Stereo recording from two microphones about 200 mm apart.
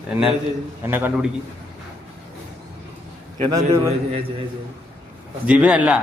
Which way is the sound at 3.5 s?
15° right (ahead or behind).